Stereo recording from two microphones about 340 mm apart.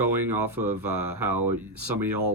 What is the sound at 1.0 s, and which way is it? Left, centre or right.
Speech, right.